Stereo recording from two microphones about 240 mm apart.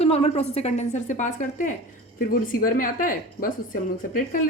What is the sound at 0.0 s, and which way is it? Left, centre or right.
A woman's voice, left.